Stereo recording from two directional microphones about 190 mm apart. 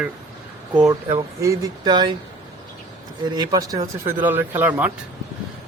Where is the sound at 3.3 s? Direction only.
20° right (ahead or behind).